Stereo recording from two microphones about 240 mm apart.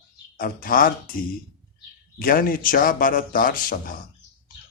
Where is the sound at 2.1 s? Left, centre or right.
Left.